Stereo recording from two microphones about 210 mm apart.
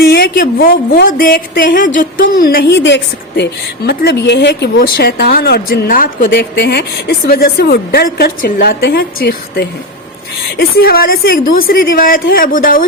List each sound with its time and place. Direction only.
0.0 s a woman's voice: 45° left (ahead or behind)